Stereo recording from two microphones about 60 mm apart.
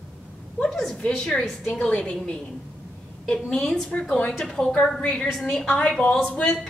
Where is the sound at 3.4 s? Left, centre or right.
Centre.